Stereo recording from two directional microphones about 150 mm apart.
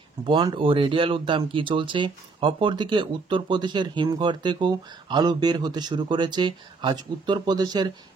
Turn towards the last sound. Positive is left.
turn(degrees=-30)  # may be behind; listen again after turning